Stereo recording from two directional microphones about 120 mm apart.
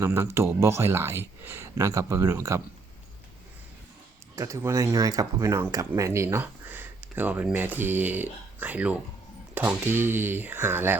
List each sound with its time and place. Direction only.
0.0 s a man's voice: 20° right (ahead or behind)
4.4 s speech: 25° right (ahead or behind)